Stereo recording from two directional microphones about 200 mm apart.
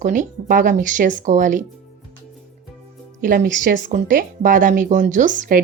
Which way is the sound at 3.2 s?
40° right (ahead or behind).